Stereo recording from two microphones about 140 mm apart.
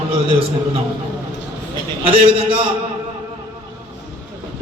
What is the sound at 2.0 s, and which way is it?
Speech, 40° right (ahead or behind).